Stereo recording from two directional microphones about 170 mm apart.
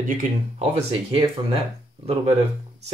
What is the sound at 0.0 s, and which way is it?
Speech, 50° right (ahead or behind).